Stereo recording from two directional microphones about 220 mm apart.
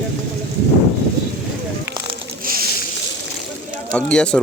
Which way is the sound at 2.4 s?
40° right (ahead or behind).